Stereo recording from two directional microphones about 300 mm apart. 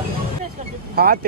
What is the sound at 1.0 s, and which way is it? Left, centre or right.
Speech, right.